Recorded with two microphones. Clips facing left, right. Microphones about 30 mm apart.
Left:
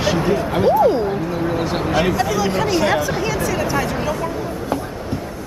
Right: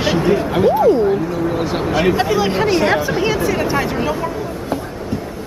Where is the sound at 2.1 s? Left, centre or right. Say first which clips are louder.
Right 2 dB; right.